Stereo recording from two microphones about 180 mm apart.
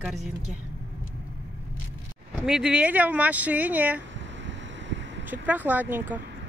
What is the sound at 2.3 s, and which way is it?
Speech, 5° right (ahead or behind).